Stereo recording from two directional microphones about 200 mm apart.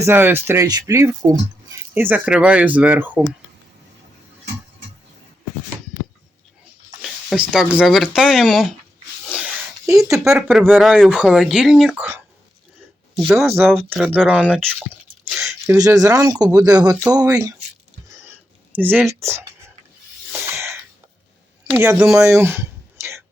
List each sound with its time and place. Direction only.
0.0 s speech: 10° right (ahead or behind)
7.0 s speech: centre (ahead or behind)
9.3 s a sound: 5° right (ahead or behind)
10.3 s speech: 5° right (ahead or behind)
13.1 s speech: centre (ahead or behind)
15.3 s a sound: centre (ahead or behind)
15.7 s speech: 15° right (ahead or behind)
18.7 s speech: 10° right (ahead or behind)
20.3 s sneeze: 15° right (ahead or behind)
21.7 s speech: 5° right (ahead or behind)
22.2 s a sound: 15° right (ahead or behind)